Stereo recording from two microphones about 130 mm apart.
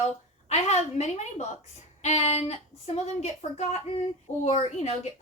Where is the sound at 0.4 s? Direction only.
60° left (ahead or behind).